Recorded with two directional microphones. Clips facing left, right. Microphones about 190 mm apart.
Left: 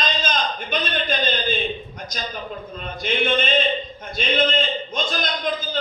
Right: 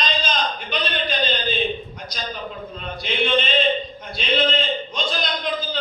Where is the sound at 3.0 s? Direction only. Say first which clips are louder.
Even; 45° left (ahead or behind).